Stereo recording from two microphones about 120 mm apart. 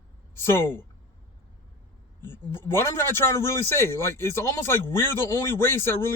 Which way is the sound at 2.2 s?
20° left (ahead or behind).